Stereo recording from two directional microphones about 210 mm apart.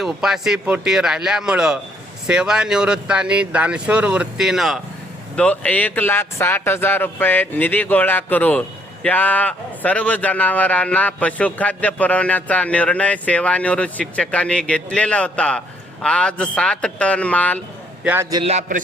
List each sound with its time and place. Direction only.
0.0 s a man's voice: centre (ahead or behind)
18.0 s a man's voice: 10° right (ahead or behind)
18.4 s a man's voice: 30° right (ahead or behind)